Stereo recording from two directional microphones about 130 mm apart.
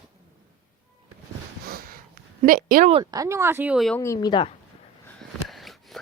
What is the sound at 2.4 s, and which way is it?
Speech, 90° right.